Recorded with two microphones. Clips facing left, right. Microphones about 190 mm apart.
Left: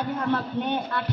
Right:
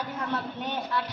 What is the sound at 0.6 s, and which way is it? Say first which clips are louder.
Speech: left 4 dB; 55° left (ahead or behind).